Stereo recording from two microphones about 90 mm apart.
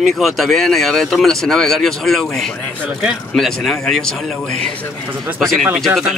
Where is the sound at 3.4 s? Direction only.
5° left (ahead or behind).